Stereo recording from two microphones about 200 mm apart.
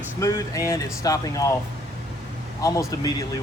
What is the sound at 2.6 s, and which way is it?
Speech, 15° left (ahead or behind).